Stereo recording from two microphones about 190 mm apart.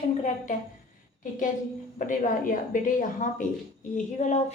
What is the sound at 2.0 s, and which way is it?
A woman's voice, 45° left (ahead or behind).